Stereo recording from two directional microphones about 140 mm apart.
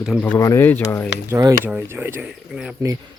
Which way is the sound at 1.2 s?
20° right (ahead or behind).